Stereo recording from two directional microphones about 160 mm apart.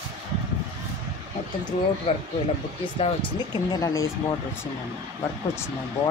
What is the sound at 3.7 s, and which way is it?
Speech, 20° left (ahead or behind).